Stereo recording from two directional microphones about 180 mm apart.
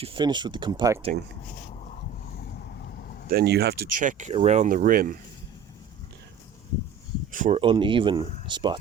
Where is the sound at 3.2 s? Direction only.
60° right (ahead or behind).